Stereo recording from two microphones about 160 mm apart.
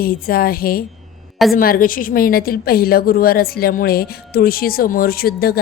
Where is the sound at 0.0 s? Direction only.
65° left (ahead or behind).